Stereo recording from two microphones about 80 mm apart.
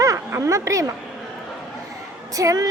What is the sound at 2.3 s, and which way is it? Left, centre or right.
Speech, right.